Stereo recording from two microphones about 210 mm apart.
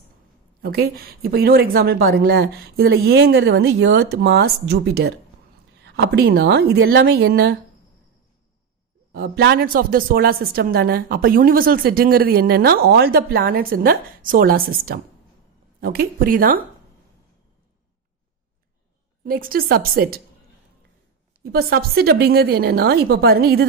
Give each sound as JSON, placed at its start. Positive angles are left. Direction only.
{"t": 0.6, "sound": "a woman's voice", "side_deg": -45}
{"t": 9.1, "sound": "a woman's voice", "side_deg": -50}
{"t": 19.2, "sound": "a woman's voice", "side_deg": -45}
{"t": 21.5, "sound": "a woman's voice", "side_deg": -45}